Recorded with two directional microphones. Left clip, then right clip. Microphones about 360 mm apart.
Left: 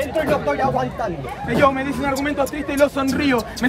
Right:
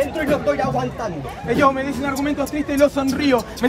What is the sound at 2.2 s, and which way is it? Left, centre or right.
Speech, centre.